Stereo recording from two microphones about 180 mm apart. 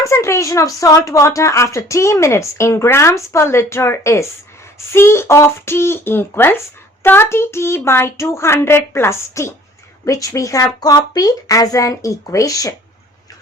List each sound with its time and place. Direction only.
0.0 s speech: 15° left (ahead or behind)